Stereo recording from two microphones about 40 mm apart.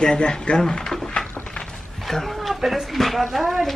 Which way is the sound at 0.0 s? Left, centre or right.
Left.